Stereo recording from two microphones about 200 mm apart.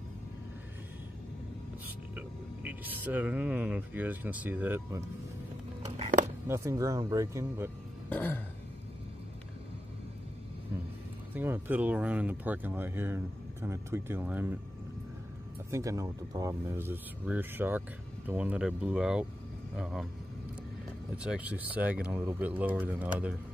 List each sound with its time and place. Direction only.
2.1 s speech: 10° right (ahead or behind)
6.4 s speech: 15° right (ahead or behind)
8.1 s throat clearing: 10° left (ahead or behind)
11.3 s speech: 10° right (ahead or behind)
15.7 s speech: 15° right (ahead or behind); by 20.1 s centre (ahead or behind)
21.2 s speech: 5° right (ahead or behind)